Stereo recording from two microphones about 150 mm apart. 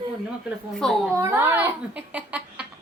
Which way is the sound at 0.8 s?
5° left (ahead or behind).